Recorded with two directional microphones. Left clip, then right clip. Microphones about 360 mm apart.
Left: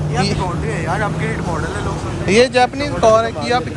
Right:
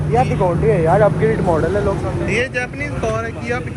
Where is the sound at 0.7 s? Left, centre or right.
Centre.